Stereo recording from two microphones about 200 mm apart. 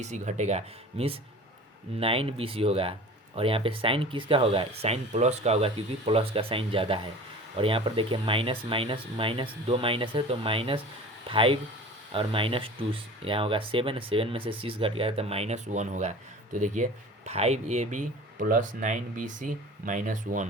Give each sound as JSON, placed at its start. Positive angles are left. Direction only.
{"t": 0.0, "sound": "speech", "side_deg": -35}